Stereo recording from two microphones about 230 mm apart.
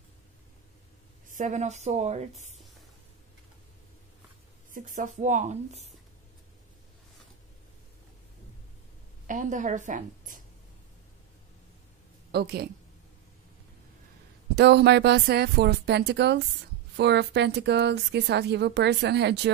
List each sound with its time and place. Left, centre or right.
1.3 s speech: right
4.7 s speech: right
9.3 s speech: right
12.3 s a woman's voice: right
14.5 s a woman's voice: right